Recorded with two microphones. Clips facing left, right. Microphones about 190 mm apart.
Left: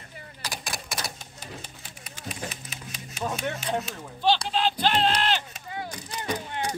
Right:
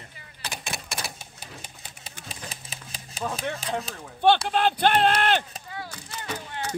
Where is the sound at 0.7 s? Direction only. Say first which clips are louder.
Even; 5° right (ahead or behind).